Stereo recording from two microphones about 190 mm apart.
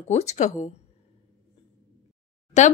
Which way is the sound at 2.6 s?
40° left (ahead or behind).